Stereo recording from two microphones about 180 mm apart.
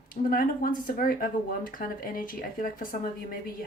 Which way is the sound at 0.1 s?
50° left (ahead or behind).